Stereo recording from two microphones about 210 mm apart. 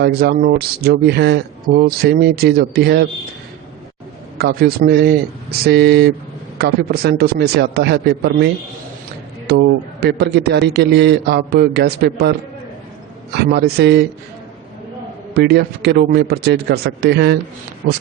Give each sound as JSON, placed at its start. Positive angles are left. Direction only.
{"t": 0.0, "sound": "speech", "side_deg": -50}
{"t": 4.4, "sound": "speech", "side_deg": -50}
{"t": 9.5, "sound": "speech", "side_deg": -55}
{"t": 13.3, "sound": "speech", "side_deg": -50}
{"t": 15.4, "sound": "speech", "side_deg": -50}